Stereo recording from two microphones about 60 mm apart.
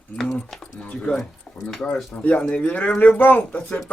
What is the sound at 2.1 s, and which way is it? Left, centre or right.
Speech, left.